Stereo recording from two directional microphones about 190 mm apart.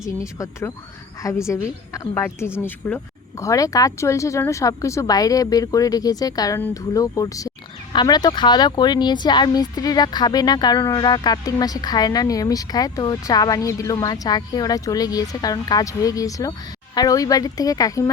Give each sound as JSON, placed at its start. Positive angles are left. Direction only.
{"t": 0.0, "sound": "speech", "side_deg": 15}